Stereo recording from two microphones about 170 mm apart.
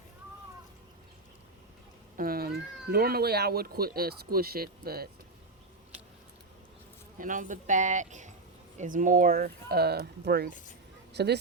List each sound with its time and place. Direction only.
2.1 s speech: 60° right (ahead or behind)
7.2 s speech: 50° right (ahead or behind); by 11.3 s 80° right